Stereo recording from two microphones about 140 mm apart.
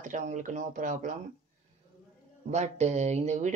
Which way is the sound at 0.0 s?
65° right (ahead or behind).